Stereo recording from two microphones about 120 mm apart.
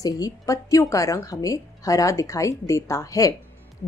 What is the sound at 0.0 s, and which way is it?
Speech, 30° left (ahead or behind).